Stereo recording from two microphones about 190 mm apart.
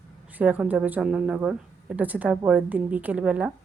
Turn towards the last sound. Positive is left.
turn(degrees=-5)  # may be behind; listen again after turning